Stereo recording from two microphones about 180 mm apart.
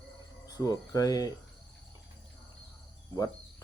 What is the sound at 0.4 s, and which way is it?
Speech, 20° left (ahead or behind).